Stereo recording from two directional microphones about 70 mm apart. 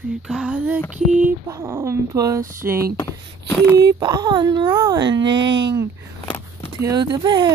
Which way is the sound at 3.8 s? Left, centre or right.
Right.